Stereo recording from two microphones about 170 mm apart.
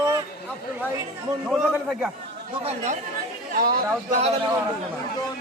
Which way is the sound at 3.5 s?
60° right (ahead or behind).